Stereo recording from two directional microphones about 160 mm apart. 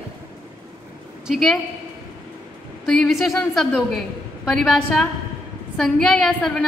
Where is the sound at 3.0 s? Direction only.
Centre (ahead or behind).